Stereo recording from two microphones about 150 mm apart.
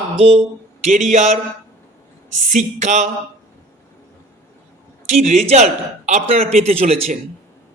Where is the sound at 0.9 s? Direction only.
55° right (ahead or behind).